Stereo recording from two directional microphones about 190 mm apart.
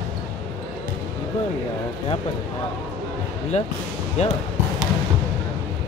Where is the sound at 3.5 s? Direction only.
35° left (ahead or behind).